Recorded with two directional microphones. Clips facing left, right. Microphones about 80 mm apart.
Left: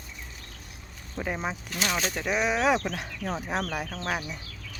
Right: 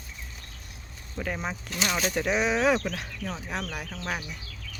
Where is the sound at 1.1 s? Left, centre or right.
Centre.